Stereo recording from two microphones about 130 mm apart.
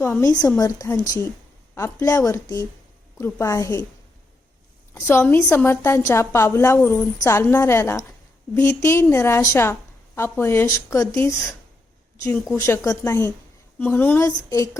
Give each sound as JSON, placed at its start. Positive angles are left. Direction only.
{"t": 0.0, "sound": "a woman's voice", "side_deg": 20}
{"t": 4.9, "sound": "a woman's voice", "side_deg": 20}
{"t": 12.5, "sound": "a woman's voice", "side_deg": 20}